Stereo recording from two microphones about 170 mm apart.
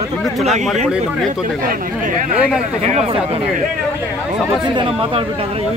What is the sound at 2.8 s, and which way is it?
Speech, 35° right (ahead or behind).